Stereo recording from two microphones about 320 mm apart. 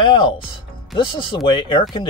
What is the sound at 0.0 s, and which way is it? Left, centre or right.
Speech, centre.